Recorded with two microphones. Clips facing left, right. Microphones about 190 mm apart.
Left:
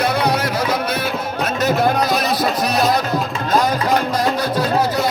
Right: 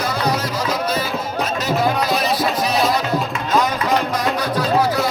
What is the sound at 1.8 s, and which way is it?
Music, 50° left (ahead or behind).